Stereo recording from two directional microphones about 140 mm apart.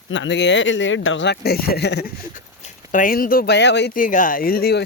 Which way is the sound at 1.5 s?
90° left.